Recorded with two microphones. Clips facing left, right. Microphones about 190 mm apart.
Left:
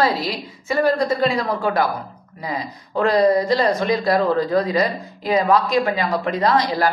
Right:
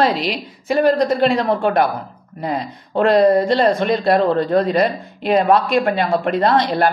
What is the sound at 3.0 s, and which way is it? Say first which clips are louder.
A woman's voice: right 3 dB; 65° right (ahead or behind).